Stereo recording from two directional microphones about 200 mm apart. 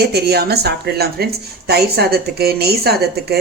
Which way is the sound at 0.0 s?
55° right (ahead or behind).